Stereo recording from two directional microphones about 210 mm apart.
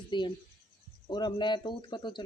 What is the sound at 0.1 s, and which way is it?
Speech, 20° left (ahead or behind).